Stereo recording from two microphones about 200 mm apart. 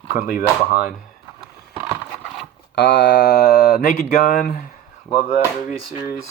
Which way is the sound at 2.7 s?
60° left (ahead or behind).